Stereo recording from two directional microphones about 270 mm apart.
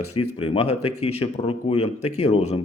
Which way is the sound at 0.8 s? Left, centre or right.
Left.